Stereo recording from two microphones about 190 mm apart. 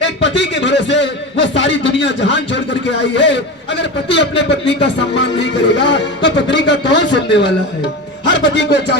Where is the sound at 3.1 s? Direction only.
70° left (ahead or behind).